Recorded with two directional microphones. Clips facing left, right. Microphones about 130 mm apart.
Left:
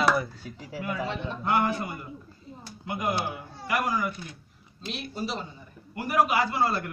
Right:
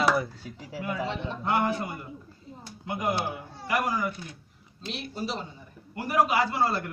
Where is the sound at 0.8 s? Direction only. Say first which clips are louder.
Even; 25° right (ahead or behind).